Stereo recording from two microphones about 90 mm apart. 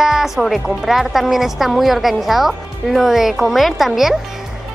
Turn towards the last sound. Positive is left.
turn(degrees=0)  # may be behind; listen again after turning